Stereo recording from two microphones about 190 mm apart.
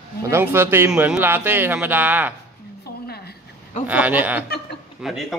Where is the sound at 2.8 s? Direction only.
55° left (ahead or behind).